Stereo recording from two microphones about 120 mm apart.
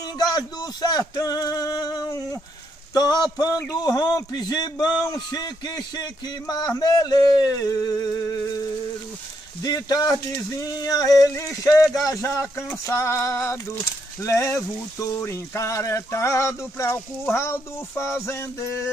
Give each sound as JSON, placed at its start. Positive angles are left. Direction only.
{"t": 0.3, "sound": "male singing", "side_deg": 35}
{"t": 2.9, "sound": "a man's voice", "side_deg": 35}
{"t": 9.6, "sound": "a man's voice", "side_deg": 30}